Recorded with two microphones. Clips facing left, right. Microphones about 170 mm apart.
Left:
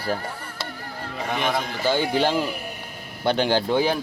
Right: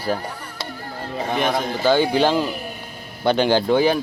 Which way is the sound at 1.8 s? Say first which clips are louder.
Right 5 dB; 85° right.